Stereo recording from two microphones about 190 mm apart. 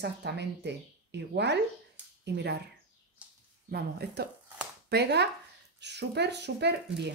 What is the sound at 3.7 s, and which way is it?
A woman's voice, 60° right (ahead or behind).